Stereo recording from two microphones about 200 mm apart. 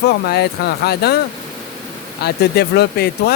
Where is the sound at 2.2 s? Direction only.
55° left (ahead or behind).